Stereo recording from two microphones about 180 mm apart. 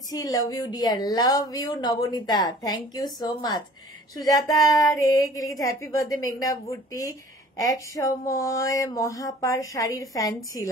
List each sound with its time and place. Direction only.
0.1 s a woman's voice: 20° left (ahead or behind)